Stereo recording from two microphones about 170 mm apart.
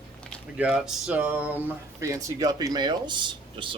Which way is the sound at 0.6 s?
5° right (ahead or behind).